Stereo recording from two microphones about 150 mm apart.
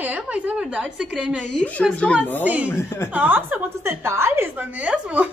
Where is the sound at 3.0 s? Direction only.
10° right (ahead or behind).